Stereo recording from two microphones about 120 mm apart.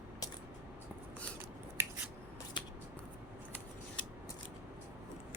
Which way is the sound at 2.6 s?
40° left (ahead or behind).